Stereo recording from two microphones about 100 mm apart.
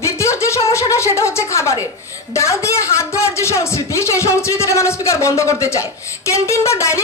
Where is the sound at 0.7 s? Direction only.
30° left (ahead or behind).